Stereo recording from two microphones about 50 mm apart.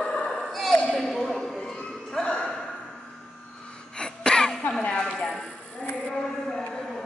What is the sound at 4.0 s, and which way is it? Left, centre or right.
Cough, centre.